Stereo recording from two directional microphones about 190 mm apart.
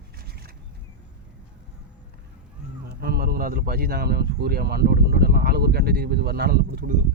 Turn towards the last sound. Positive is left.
turn(degrees=-55)  # may be behind; listen again after turning